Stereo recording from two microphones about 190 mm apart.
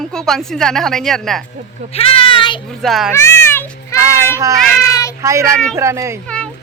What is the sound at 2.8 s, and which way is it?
Speech, centre (ahead or behind).